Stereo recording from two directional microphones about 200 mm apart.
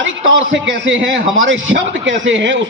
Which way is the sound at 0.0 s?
65° right (ahead or behind).